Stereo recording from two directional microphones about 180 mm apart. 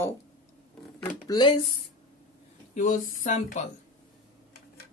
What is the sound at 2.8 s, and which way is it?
Speech, 45° left (ahead or behind).